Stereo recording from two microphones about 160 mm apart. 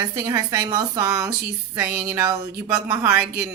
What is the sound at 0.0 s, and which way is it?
Speech, 20° right (ahead or behind).